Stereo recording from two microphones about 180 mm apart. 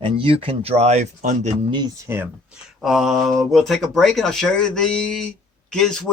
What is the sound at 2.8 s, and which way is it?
Speech, centre (ahead or behind).